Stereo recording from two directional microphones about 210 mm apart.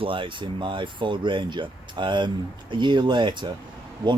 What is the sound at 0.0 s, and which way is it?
Speech, 25° right (ahead or behind).